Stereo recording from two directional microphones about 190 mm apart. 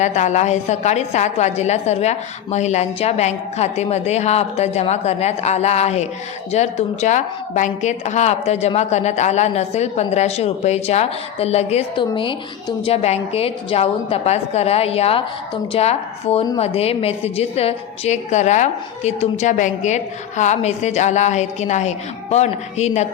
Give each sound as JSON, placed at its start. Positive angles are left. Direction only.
{"t": 0.0, "sound": "a woman's voice", "side_deg": 40}